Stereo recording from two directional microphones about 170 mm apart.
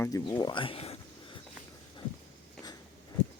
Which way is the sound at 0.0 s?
25° left (ahead or behind).